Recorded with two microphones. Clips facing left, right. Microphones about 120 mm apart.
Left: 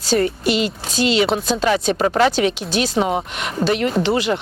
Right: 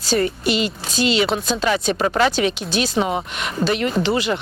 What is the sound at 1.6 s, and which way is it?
Speech, 50° left (ahead or behind).